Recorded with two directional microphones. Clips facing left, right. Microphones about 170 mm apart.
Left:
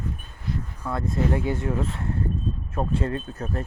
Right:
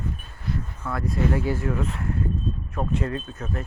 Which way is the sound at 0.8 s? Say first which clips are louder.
Even; 20° left (ahead or behind).